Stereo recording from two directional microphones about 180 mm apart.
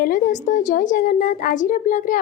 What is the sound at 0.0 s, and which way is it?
A woman's voice, 45° left (ahead or behind).